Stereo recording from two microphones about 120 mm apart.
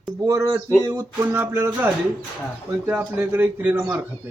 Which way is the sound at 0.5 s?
20° right (ahead or behind).